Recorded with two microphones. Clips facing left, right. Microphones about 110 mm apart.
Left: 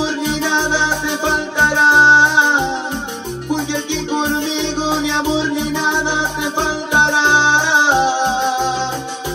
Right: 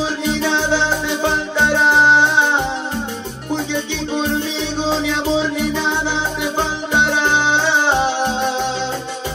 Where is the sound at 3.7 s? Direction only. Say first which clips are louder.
Left 2 dB; 20° left (ahead or behind).